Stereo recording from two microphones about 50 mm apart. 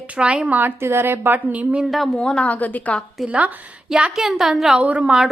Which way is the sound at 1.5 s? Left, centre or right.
Right.